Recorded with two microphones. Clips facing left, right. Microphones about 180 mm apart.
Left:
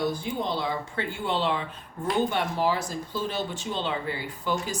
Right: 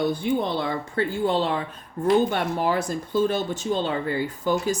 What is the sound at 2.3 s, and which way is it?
Speech, 55° right (ahead or behind).